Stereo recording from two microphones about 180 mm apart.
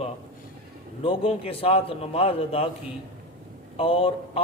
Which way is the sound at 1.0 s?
30° left (ahead or behind).